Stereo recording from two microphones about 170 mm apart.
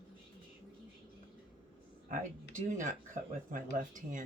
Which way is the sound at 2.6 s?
50° right (ahead or behind).